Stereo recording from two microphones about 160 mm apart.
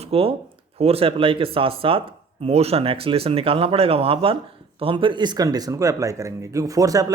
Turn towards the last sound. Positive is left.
turn(degrees=-20)  # may be behind; listen again after turning